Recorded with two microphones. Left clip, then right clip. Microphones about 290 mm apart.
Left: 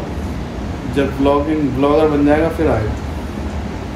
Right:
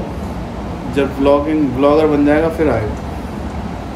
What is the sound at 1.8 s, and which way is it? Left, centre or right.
Speech, centre.